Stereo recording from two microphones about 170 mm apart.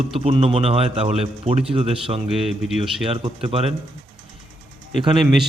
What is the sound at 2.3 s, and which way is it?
Speech, centre (ahead or behind).